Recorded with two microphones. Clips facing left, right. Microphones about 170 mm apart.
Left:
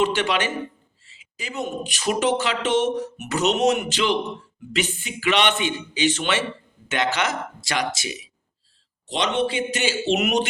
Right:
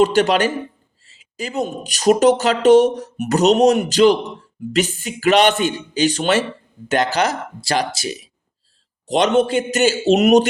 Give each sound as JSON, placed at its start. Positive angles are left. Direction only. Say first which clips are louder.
{"t": 0.0, "sound": "speech", "louder": "right 7 dB", "side_deg": -40}
{"t": 9.0, "sound": "a man's voice", "louder": "right 7 dB", "side_deg": -45}